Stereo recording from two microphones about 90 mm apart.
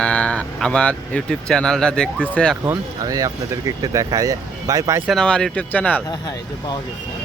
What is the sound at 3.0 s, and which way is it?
Speech, 40° right (ahead or behind).